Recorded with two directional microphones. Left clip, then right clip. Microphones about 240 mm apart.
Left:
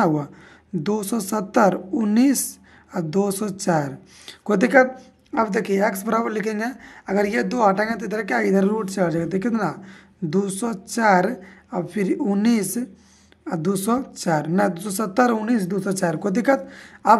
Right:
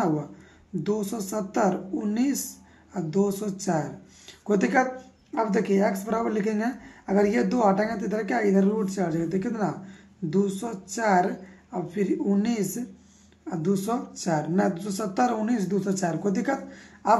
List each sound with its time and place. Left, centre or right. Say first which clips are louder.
0.8 s a woman's voice: left 4 dB; left